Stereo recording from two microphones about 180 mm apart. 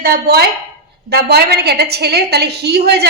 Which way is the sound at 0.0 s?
60° right (ahead or behind).